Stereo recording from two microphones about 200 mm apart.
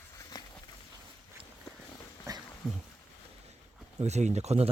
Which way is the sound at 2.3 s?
20° right (ahead or behind).